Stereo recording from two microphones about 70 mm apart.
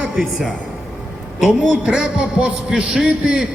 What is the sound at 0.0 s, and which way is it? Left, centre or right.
A man's voice, centre.